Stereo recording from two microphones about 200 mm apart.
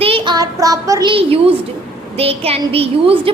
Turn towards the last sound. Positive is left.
turn(degrees=-30)  # may be behind; listen again after turning